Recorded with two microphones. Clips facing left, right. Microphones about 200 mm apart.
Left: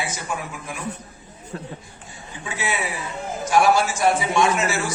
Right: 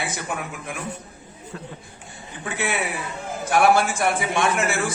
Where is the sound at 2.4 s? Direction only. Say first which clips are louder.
Right 1 dB; 55° right (ahead or behind).